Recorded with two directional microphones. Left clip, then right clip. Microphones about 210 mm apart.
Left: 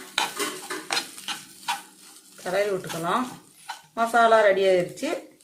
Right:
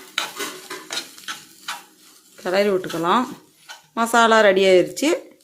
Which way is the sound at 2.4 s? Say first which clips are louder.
Right 6 dB; 50° right (ahead or behind).